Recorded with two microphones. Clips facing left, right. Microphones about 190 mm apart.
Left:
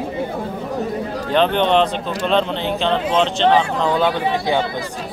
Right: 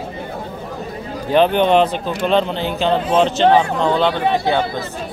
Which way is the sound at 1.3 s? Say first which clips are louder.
Right 3 dB; 10° right (ahead or behind).